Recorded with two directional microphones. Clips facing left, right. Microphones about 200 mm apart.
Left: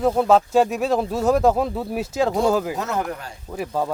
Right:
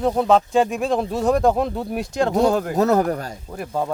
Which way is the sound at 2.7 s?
40° right (ahead or behind).